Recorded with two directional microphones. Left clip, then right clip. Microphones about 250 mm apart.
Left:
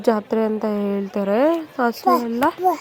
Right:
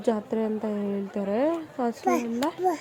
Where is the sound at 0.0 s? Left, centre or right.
Centre.